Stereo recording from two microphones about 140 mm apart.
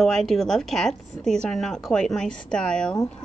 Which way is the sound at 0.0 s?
Centre (ahead or behind).